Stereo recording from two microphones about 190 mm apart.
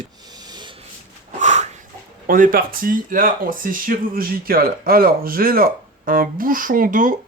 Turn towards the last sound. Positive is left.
turn(degrees=-45)  # may be behind; listen again after turning